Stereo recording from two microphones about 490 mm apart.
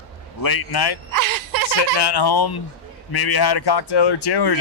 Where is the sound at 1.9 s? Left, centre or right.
Left.